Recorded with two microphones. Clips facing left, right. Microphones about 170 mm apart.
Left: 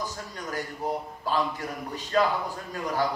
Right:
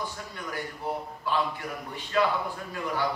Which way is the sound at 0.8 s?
40° left (ahead or behind).